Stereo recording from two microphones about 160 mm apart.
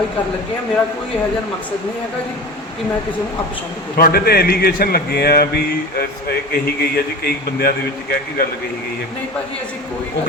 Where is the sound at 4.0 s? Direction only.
75° left (ahead or behind).